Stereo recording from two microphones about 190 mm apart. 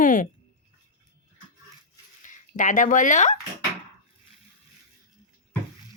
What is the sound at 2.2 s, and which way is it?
Speech, 40° left (ahead or behind).